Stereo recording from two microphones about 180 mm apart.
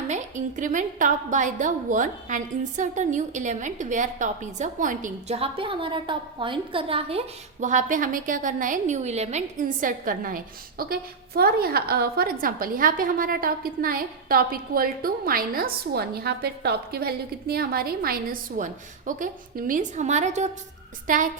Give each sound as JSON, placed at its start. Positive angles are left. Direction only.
{"t": 0.1, "sound": "a woman's voice", "side_deg": -45}
{"t": 5.4, "sound": "a woman's voice", "side_deg": -30}